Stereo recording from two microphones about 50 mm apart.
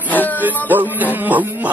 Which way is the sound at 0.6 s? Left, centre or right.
Right.